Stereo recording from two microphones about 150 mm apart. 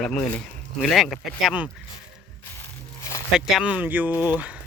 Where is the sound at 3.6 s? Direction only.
10° right (ahead or behind).